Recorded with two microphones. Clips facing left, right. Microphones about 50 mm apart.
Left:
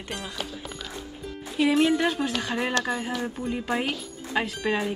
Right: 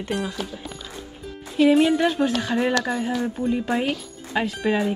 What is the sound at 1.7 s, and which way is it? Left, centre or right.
Speech, centre.